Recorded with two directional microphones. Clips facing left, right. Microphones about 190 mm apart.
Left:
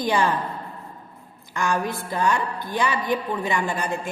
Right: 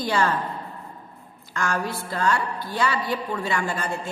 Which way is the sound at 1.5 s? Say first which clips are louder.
Left 2 dB; 15° left (ahead or behind).